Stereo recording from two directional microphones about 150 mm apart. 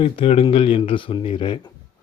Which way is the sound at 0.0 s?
40° left (ahead or behind).